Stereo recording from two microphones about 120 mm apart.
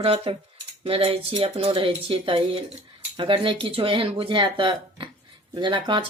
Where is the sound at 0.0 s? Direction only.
55° right (ahead or behind).